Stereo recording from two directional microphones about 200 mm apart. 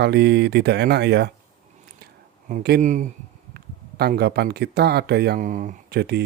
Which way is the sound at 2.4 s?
45° right (ahead or behind).